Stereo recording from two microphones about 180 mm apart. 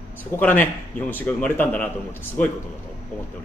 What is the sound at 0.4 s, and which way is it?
A man's voice, 10° left (ahead or behind).